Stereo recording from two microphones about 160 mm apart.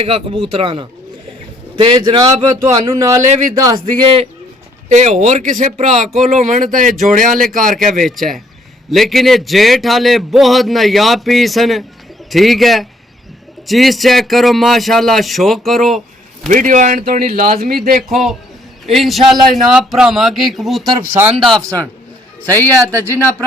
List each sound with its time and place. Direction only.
0.0 s speech: 35° right (ahead or behind)
4.9 s speech: 50° right (ahead or behind)
8.0 s a man's voice: centre (ahead or behind)
16.5 s speech: 55° right (ahead or behind)
18.9 s a man's voice: centre (ahead or behind)
21.6 s speech: 20° right (ahead or behind)
22.4 s a man's voice: 15° left (ahead or behind)
22.8 s speech: 15° right (ahead or behind)